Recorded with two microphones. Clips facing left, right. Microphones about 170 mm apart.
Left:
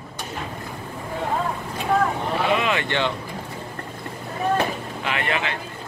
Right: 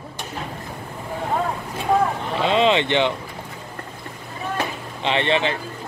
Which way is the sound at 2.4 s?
25° right (ahead or behind).